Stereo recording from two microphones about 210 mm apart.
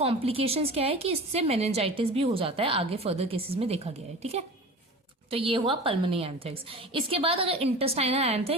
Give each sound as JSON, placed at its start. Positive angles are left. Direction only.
{"t": 0.0, "sound": "a woman's voice", "side_deg": -25}